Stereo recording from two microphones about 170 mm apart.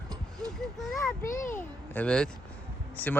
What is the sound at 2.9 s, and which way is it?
Speech, 10° left (ahead or behind).